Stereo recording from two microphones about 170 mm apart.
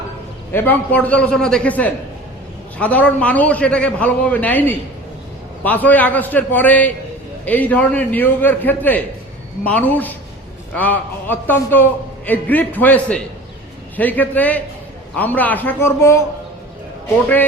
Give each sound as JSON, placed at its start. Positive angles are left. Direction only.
{"t": 0.5, "sound": "a man's voice", "side_deg": 10}